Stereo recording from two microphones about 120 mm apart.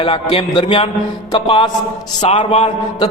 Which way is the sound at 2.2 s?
55° left (ahead or behind).